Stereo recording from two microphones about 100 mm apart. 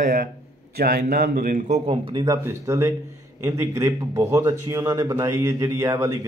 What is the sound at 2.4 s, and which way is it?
Speech, 25° right (ahead or behind).